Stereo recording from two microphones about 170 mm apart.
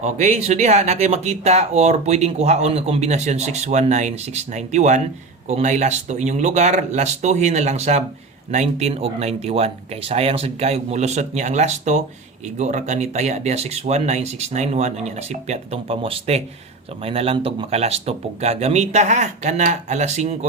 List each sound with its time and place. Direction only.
0.0 s speech: 40° right (ahead or behind)